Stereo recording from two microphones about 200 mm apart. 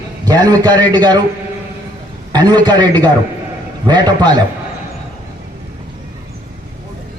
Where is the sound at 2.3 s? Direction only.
20° right (ahead or behind).